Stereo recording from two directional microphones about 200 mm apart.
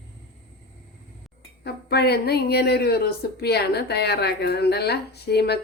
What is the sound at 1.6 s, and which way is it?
A woman's voice, 55° left (ahead or behind).